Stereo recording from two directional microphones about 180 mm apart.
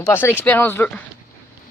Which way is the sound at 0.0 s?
15° left (ahead or behind).